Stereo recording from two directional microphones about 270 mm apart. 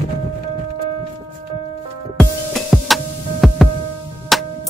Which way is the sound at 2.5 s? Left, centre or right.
Centre.